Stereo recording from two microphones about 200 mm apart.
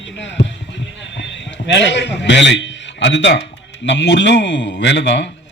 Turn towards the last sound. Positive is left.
turn(degrees=60)  # may be behind; listen again after turning